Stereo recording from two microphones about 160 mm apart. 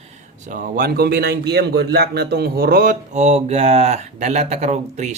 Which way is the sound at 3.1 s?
45° right (ahead or behind).